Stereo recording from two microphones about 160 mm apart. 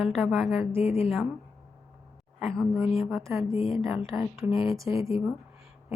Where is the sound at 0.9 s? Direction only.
40° left (ahead or behind).